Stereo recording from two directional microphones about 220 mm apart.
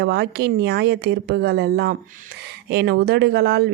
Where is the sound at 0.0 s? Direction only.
50° right (ahead or behind).